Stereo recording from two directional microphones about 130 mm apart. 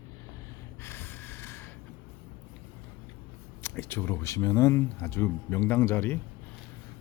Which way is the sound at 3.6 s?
20° left (ahead or behind).